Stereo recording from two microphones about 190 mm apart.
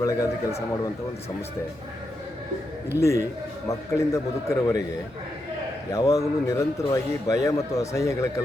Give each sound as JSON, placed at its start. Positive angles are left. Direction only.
{"t": 0.0, "sound": "a man's voice", "side_deg": 15}
{"t": 3.0, "sound": "a man's voice", "side_deg": 15}
{"t": 5.9, "sound": "a man's voice", "side_deg": 20}